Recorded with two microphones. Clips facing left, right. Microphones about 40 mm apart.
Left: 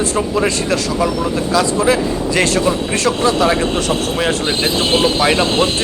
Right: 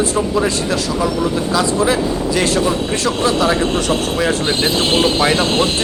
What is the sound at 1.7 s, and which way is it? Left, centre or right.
Speech, centre.